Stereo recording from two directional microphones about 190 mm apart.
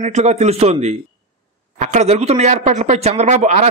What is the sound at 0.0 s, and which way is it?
A man's voice, 35° right (ahead or behind).